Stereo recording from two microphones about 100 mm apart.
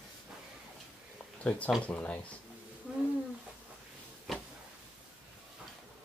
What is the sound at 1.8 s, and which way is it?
Speech, 15° left (ahead or behind).